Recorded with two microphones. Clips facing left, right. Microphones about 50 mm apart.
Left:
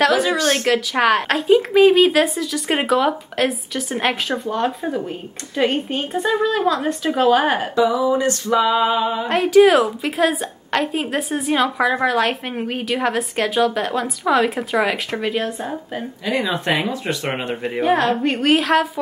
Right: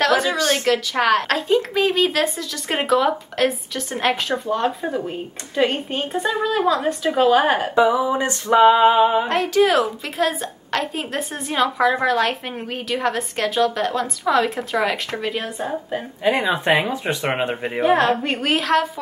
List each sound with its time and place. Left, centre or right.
0.0 s a woman's voice: centre
7.7 s a sound: right
9.3 s a woman's voice: centre
16.3 s speech: right
17.8 s a woman's voice: centre